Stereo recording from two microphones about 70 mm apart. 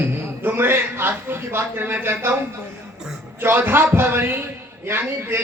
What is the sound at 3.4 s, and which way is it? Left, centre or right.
Speech, right.